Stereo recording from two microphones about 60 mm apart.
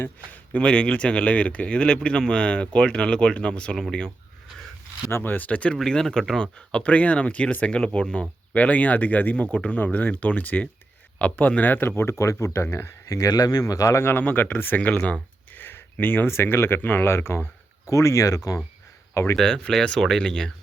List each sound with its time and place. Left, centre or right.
0.0 s speech: left
5.1 s speech: left
5.7 s speech: centre; by 12.0 s left
12.0 s speech: left
13.1 s speech: left
14.0 s speech: left
14.8 s speech: left
17.8 s speech: left
19.1 s speech: left
19.4 s speech: centre